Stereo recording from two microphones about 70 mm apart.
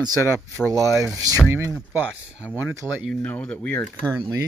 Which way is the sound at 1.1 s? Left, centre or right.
Right.